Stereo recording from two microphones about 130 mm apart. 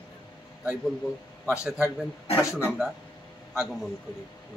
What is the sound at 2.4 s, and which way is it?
Speech, 20° left (ahead or behind).